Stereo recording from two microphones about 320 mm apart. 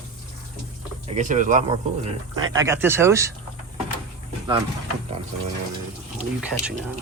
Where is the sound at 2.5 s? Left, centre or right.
Centre.